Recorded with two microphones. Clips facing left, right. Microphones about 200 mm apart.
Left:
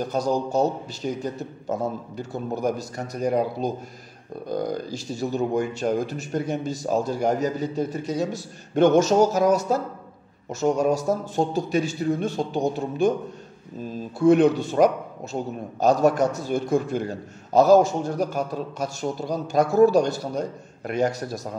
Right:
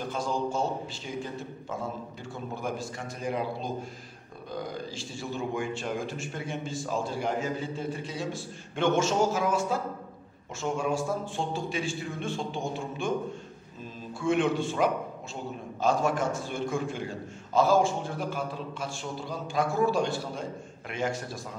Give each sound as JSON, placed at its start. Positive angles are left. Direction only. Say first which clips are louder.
{"t": 0.0, "sound": "a man's voice", "louder": "left 6 dB", "side_deg": 40}
{"t": 14.1, "sound": "a man's voice", "louder": "left 9 dB", "side_deg": 40}